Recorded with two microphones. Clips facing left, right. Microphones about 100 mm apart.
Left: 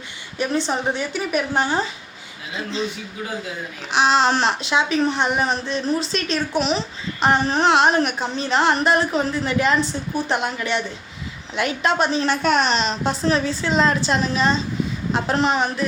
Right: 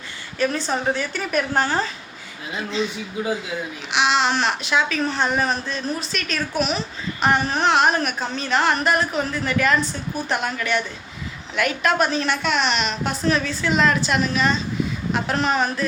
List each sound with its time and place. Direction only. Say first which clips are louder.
0.3 s a woman's voice: even; 20° left (ahead or behind)
3.9 s a child's voice: left 3 dB; 40° left (ahead or behind); by 15.9 s 20° left (ahead or behind)